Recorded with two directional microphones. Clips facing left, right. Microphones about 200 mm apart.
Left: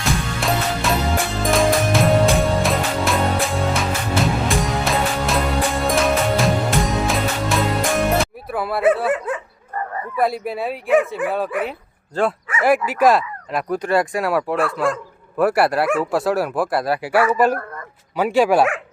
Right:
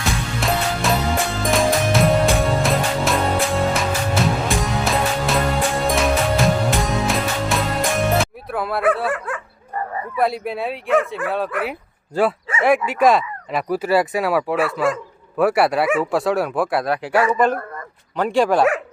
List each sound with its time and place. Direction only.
0.0 s music: centre (ahead or behind)
9.0 s dog: 20° left (ahead or behind)
10.2 s speech: centre (ahead or behind)